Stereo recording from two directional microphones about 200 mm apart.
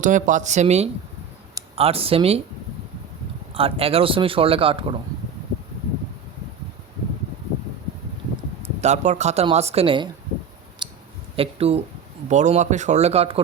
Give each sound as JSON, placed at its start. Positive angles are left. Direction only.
{"t": 0.0, "sound": "speech", "side_deg": -40}
{"t": 3.5, "sound": "speech", "side_deg": -30}
{"t": 8.6, "sound": "speech", "side_deg": -35}
{"t": 10.8, "sound": "clicking", "side_deg": -20}
{"t": 11.3, "sound": "speech", "side_deg": -30}